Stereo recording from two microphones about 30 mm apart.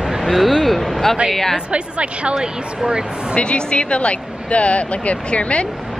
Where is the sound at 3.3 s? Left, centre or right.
Left.